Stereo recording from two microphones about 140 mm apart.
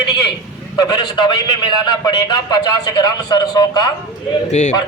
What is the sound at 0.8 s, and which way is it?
A man's voice, 30° left (ahead or behind).